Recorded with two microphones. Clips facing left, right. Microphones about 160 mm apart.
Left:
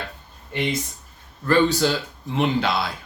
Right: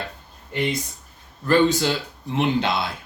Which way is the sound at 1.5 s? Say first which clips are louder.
Even; 20° right (ahead or behind).